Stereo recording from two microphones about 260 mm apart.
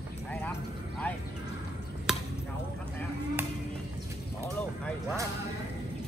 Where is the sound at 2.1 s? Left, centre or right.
Centre.